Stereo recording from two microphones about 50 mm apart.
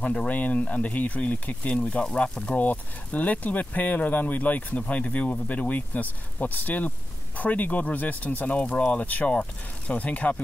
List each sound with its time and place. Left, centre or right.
0.0 s speech: left